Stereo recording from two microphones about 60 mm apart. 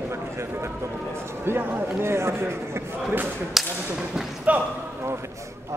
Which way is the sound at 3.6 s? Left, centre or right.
Centre.